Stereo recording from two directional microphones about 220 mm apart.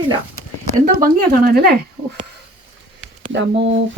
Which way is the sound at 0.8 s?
40° right (ahead or behind).